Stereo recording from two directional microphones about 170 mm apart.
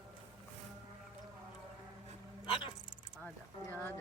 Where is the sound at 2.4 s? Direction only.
30° left (ahead or behind).